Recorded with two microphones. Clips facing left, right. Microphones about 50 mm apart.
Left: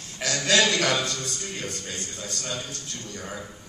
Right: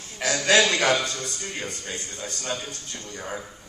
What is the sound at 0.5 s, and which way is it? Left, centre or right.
A man's voice, right.